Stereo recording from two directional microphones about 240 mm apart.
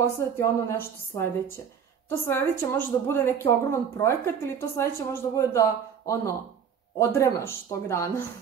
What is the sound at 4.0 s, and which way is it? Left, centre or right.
Speech, centre.